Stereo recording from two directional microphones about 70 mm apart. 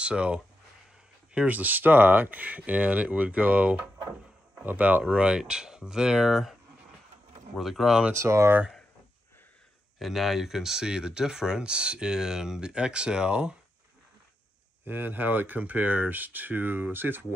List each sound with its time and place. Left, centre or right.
0.0 s speech: centre
7.5 s speech: centre
8.1 s speech: right
9.9 s speech: centre
14.9 s speech: right